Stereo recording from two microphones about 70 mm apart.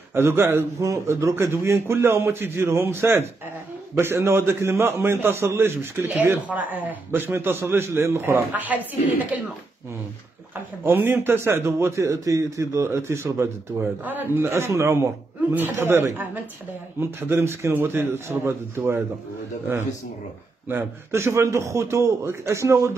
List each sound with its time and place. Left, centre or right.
0.1 s a man's voice: right
0.7 s a man's voice: right
6.5 s speech: right
7.1 s a man's voice: right
10.8 s a man's voice: right
14.0 s a man's voice: right
15.5 s a man's voice: right
17.2 s a man's voice: right
21.1 s a man's voice: right